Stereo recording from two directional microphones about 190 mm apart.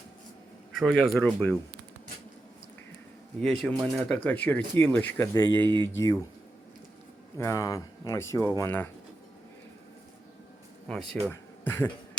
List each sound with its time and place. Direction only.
0.8 s speech: centre (ahead or behind)
3.4 s speech: centre (ahead or behind)
7.3 s speech: 15° left (ahead or behind)
10.8 s speech: 5° left (ahead or behind)